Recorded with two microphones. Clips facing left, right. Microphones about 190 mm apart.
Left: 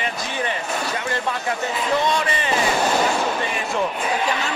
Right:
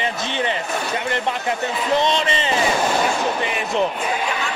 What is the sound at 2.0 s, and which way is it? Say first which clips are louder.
Speech: right 2 dB; 25° right (ahead or behind).